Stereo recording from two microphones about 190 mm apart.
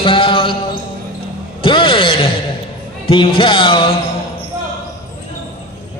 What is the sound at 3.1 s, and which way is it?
Music, 25° left (ahead or behind).